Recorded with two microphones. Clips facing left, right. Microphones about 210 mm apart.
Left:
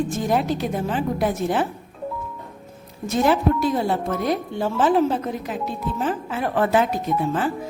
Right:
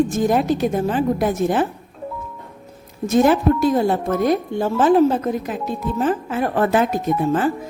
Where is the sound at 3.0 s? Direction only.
45° right (ahead or behind).